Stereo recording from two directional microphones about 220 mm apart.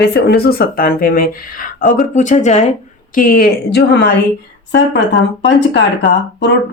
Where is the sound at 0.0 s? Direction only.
50° left (ahead or behind).